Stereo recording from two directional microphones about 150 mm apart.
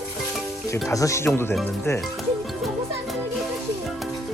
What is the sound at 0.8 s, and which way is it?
Speech, 20° left (ahead or behind).